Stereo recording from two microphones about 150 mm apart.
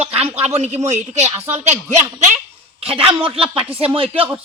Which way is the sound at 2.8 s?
40° right (ahead or behind).